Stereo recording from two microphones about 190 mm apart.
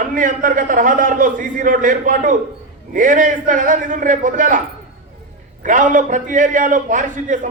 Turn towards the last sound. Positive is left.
turn(degrees=-45)  # may be behind; listen again after turning